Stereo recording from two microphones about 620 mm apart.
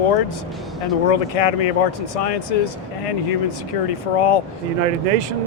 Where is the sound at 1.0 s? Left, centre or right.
Left.